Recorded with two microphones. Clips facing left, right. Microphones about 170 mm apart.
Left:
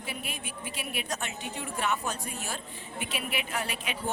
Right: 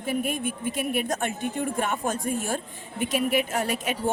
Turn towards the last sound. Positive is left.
turn(degrees=-45)  # may be behind; listen again after turning